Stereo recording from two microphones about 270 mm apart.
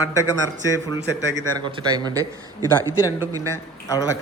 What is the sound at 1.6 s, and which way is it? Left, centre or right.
A man's voice, centre.